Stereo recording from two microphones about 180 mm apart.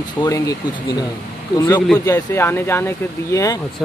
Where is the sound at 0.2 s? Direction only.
20° left (ahead or behind).